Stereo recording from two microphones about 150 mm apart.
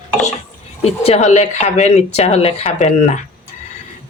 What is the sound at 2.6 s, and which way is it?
Speech, 55° left (ahead or behind).